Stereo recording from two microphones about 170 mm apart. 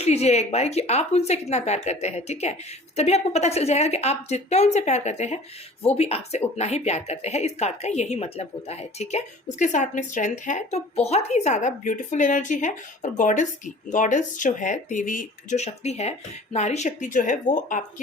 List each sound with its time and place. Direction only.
0.0 s speech: 40° left (ahead or behind)